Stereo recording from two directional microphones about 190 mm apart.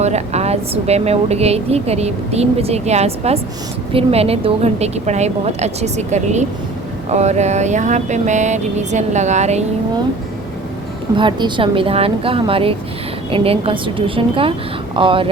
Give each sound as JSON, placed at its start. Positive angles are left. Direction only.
{"t": 0.0, "sound": "a woman's voice", "side_deg": -35}
{"t": 11.2, "sound": "a woman's voice", "side_deg": -25}